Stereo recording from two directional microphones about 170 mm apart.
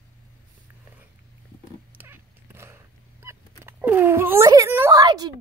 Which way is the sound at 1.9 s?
15° right (ahead or behind).